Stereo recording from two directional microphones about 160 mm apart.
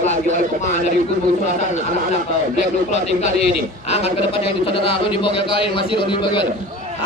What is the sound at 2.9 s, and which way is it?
A man's voice, 45° left (ahead or behind).